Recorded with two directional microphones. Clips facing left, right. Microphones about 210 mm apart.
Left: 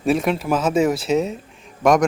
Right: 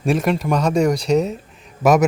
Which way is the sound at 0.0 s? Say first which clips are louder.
Even; centre (ahead or behind).